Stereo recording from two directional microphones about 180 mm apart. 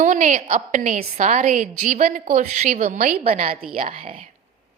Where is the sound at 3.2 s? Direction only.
35° right (ahead or behind).